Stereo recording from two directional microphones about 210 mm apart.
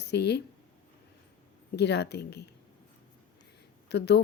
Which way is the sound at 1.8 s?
50° left (ahead or behind).